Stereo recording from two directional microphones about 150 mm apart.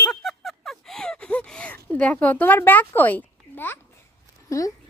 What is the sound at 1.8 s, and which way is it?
A woman's voice, 10° left (ahead or behind).